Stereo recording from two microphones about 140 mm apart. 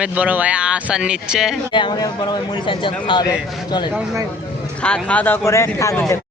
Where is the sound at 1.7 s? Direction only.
30° left (ahead or behind).